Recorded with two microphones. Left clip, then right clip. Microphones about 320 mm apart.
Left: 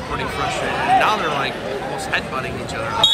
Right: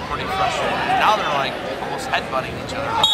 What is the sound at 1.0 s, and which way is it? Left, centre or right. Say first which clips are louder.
Speech: right 1 dB; centre.